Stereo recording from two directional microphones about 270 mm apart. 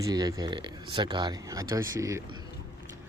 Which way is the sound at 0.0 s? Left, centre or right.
Centre.